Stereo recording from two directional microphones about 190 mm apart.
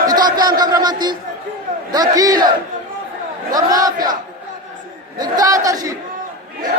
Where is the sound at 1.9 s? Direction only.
20° right (ahead or behind).